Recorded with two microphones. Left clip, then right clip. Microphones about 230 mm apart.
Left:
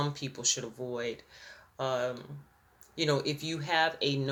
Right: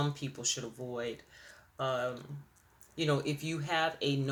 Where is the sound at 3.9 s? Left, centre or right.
Right.